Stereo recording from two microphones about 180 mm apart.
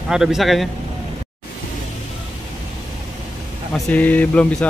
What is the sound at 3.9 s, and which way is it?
Speech, 10° left (ahead or behind).